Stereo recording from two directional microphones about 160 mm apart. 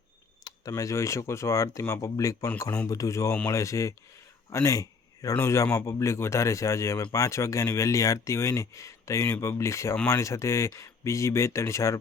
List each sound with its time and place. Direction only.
0.7 s a man's voice: 20° left (ahead or behind)